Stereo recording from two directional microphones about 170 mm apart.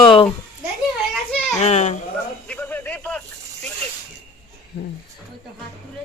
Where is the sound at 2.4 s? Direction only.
10° left (ahead or behind).